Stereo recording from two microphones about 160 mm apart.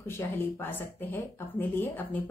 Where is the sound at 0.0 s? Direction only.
15° left (ahead or behind).